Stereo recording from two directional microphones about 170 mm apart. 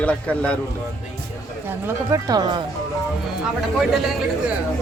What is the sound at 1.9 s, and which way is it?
Speech, 20° right (ahead or behind).